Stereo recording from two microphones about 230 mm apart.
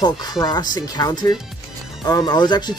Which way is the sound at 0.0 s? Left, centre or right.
Centre.